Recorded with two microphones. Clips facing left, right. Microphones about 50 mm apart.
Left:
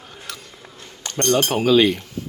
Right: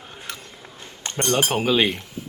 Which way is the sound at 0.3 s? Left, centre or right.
Right.